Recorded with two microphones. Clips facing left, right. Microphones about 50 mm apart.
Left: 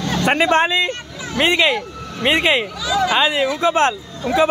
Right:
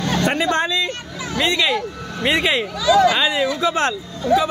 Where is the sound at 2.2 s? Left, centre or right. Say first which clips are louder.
Left 2 dB; centre.